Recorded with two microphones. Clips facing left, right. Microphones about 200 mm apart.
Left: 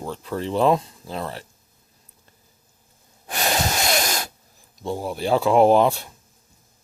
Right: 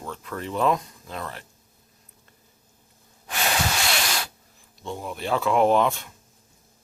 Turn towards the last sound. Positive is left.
turn(degrees=35)  # may be behind; listen again after turning